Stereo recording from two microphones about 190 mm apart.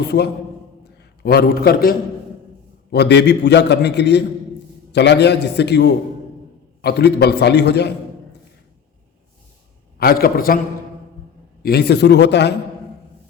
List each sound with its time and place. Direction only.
1.2 s a man's voice: 55° left (ahead or behind)
10.0 s a man's voice: 55° left (ahead or behind)
11.6 s a man's voice: 55° left (ahead or behind)